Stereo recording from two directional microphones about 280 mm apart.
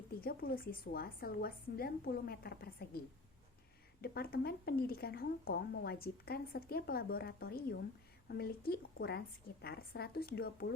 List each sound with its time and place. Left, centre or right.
0.2 s a woman's voice: left
4.0 s a woman's voice: left